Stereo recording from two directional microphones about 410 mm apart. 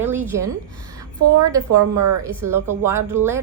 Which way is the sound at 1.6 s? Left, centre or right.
Right.